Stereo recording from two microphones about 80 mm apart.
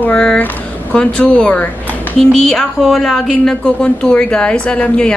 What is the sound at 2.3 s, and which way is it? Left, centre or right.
Speech, centre.